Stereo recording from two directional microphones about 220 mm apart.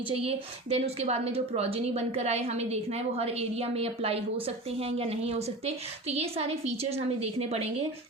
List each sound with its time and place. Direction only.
0.2 s a woman's voice: 25° right (ahead or behind)